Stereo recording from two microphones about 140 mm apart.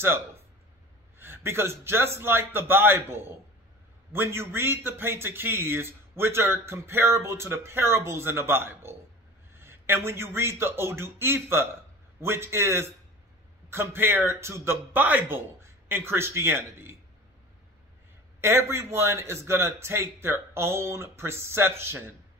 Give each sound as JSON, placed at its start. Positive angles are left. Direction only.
{"t": 1.1, "sound": "a man's voice", "side_deg": -15}
{"t": 18.4, "sound": "a man's voice", "side_deg": -20}